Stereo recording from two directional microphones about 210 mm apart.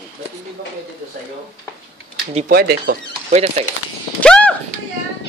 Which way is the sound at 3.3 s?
30° right (ahead or behind).